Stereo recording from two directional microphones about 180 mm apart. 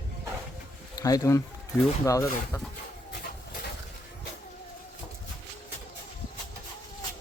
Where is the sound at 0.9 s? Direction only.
20° left (ahead or behind).